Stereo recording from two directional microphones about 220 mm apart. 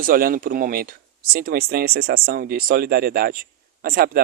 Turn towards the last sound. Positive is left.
turn(degrees=-45)  # may be behind; listen again after turning